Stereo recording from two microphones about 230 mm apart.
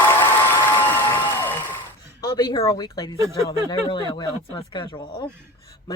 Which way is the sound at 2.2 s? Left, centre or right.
Centre.